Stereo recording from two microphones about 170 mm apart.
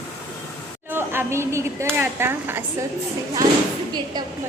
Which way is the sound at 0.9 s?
15° right (ahead or behind).